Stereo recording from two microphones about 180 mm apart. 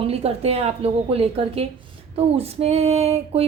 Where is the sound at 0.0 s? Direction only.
35° right (ahead or behind).